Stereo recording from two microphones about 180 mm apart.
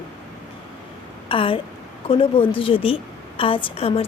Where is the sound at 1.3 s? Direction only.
30° left (ahead or behind).